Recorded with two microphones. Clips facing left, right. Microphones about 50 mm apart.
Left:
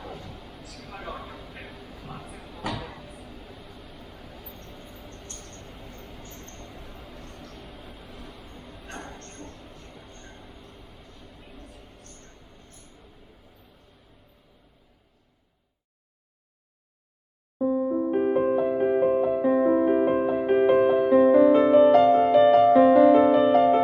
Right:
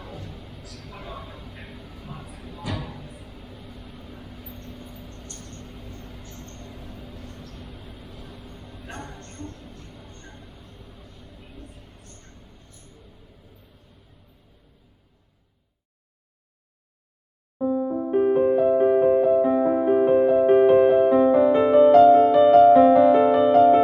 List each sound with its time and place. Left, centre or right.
0.4 s vehicle: centre
1.5 s vehicle: centre
2.1 s a sound: centre
2.6 s music: left
3.4 s vehicle: centre
5.0 s vehicle: left
5.5 s vehicle: centre
7.1 s vehicle: centre
8.5 s a sound: centre
11.6 s mouse: right
17.7 s music: centre